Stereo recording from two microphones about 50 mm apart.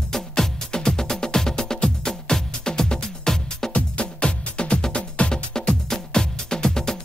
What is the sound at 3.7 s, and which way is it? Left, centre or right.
Music, left.